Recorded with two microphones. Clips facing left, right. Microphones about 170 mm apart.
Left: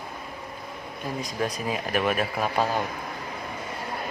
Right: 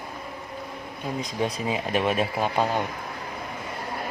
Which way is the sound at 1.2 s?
25° right (ahead or behind).